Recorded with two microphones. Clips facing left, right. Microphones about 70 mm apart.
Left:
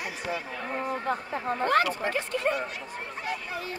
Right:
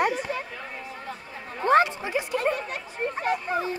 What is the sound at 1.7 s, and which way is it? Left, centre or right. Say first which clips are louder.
Speech: right 6 dB; right.